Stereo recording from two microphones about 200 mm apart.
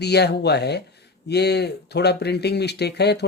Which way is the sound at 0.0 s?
55° left (ahead or behind).